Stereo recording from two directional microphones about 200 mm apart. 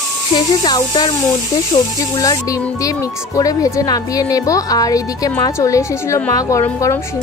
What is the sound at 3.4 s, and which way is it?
A woman's voice, 15° left (ahead or behind).